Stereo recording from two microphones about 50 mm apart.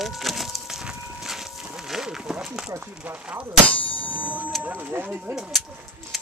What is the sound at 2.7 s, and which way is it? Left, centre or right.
Speech, right.